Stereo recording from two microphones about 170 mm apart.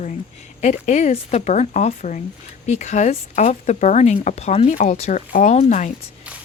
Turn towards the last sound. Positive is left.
turn(degrees=40)  # may be behind; listen again after turning